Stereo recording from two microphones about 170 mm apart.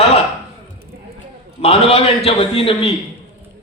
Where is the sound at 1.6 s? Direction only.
35° left (ahead or behind).